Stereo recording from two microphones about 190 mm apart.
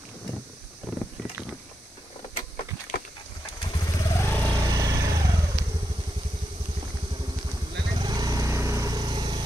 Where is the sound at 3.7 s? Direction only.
15° left (ahead or behind).